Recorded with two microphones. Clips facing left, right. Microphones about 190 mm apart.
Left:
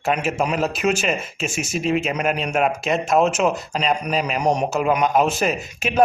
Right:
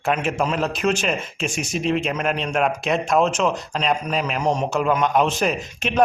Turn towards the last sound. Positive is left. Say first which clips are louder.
# even
turn(degrees=5)  # may be behind; listen again after turning